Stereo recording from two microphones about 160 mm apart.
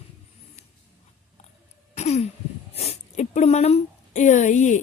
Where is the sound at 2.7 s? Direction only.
45° left (ahead or behind).